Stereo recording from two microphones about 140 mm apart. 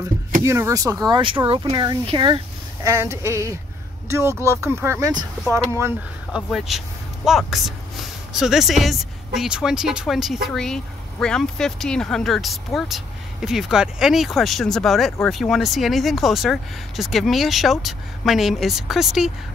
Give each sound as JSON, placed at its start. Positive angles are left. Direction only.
{"t": 0.4, "sound": "speech", "side_deg": -20}
{"t": 2.8, "sound": "speech", "side_deg": -20}
{"t": 6.3, "sound": "speech", "side_deg": 0}